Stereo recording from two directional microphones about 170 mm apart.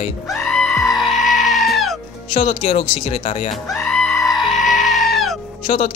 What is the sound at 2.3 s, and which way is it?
Speech, 35° left (ahead or behind).